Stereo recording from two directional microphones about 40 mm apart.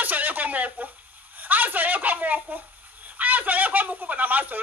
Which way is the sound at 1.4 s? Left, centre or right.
Right.